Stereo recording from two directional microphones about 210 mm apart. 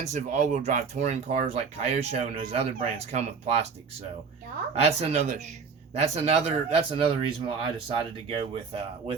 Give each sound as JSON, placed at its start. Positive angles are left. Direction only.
{"t": 0.1, "sound": "speech", "side_deg": -35}
{"t": 4.7, "sound": "speech", "side_deg": -30}